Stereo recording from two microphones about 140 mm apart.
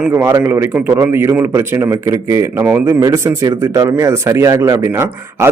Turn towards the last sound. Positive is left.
turn(degrees=-20)  # may be behind; listen again after turning